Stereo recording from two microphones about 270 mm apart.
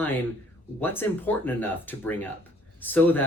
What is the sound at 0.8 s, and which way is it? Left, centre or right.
Speech, centre.